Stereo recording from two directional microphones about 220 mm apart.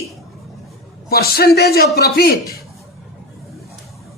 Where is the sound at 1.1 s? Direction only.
45° left (ahead or behind).